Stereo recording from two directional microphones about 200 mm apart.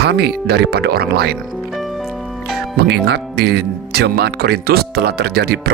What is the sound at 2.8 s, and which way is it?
Speech, 55° right (ahead or behind).